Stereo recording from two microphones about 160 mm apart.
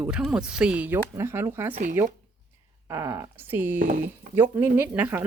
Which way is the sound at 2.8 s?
15° right (ahead or behind).